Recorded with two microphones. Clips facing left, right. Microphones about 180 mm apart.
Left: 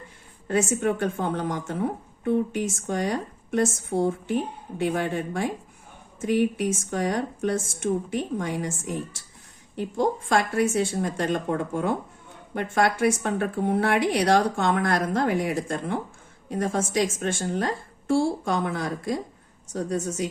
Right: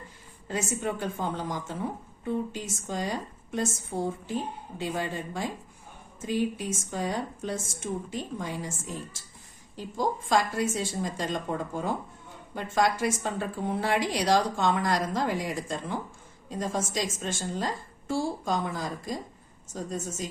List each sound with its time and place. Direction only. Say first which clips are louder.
0.4 s a woman's voice: left 7 dB; 65° left (ahead or behind)